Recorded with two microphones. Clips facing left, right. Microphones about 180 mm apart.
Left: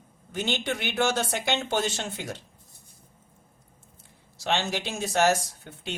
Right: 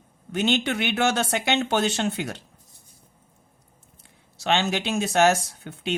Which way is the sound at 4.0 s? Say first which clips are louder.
Right 4 dB; 70° right (ahead or behind).